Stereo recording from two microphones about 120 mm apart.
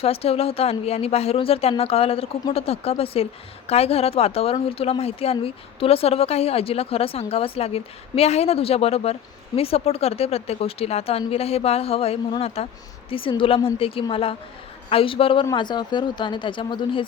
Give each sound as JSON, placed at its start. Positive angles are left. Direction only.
{"t": 0.0, "sound": "a woman's voice", "side_deg": 55}
{"t": 13.1, "sound": "a woman's voice", "side_deg": 50}